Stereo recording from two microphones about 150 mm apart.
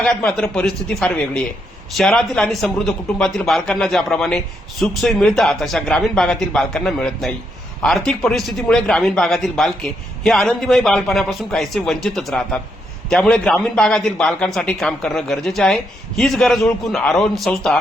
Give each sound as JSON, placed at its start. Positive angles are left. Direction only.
{"t": 0.0, "sound": "a man's voice", "side_deg": 10}